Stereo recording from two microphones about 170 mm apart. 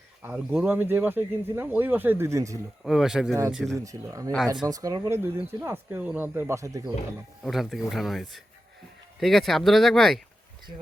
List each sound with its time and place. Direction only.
0.2 s speech: 10° right (ahead or behind)
2.8 s speech: centre (ahead or behind)
3.8 s speech: 20° right (ahead or behind)
7.4 s speech: centre (ahead or behind)